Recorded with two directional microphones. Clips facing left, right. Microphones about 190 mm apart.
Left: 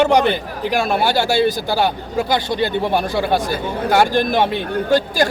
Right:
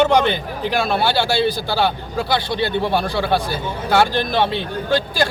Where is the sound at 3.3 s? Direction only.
45° left (ahead or behind).